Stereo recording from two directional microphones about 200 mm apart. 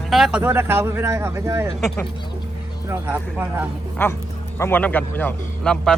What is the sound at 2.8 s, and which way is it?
Speech, 10° right (ahead or behind).